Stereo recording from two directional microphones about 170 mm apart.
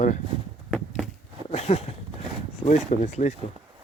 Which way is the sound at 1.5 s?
35° left (ahead or behind).